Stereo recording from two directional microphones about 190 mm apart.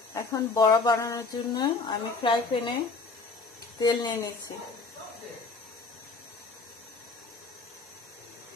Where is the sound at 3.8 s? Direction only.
20° left (ahead or behind).